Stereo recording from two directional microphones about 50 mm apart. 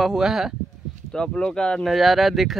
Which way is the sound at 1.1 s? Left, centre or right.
Centre.